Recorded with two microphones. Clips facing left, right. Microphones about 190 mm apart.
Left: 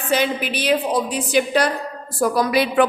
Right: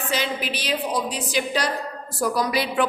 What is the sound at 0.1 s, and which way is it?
A woman's voice, 55° left (ahead or behind).